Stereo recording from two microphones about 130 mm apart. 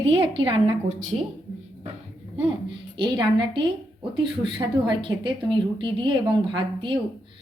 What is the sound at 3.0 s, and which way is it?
A woman's voice, 35° right (ahead or behind).